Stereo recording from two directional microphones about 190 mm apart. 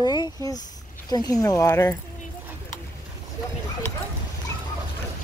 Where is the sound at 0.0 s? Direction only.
20° left (ahead or behind).